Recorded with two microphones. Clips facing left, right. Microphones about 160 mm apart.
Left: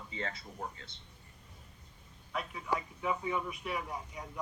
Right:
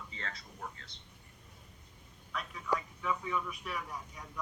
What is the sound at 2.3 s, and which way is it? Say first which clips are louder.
A man's voice: even; 30° left (ahead or behind).